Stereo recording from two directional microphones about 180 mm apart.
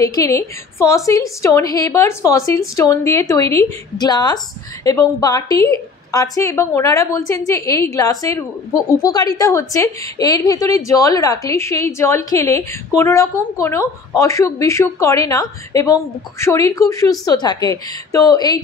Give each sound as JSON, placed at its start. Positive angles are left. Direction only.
{"t": 0.0, "sound": "a woman's voice", "side_deg": 20}